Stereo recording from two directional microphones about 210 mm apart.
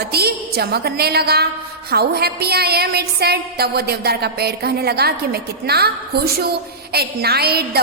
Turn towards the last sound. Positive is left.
turn(degrees=-50)  # may be behind; listen again after turning